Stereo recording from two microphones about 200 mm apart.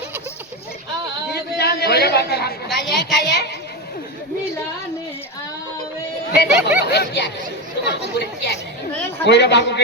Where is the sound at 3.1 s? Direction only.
55° left (ahead or behind).